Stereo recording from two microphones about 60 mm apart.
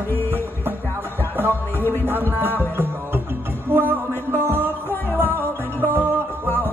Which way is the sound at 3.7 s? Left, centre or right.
Right.